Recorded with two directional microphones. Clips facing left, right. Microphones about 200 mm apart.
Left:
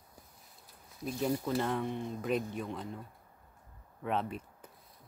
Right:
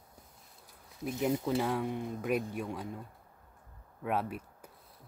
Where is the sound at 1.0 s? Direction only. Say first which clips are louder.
Right 2 dB; 20° right (ahead or behind).